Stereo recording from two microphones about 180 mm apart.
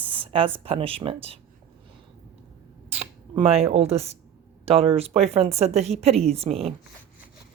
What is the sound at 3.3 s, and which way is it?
Speech, 35° right (ahead or behind).